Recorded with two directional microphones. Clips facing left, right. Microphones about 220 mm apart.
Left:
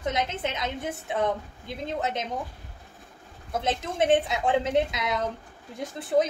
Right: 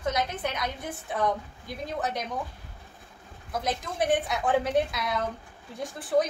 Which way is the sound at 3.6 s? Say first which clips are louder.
Left 3 dB; 25° left (ahead or behind).